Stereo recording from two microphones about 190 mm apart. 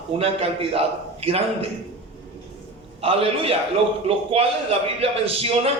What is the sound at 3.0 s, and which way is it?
A man's voice, 30° right (ahead or behind).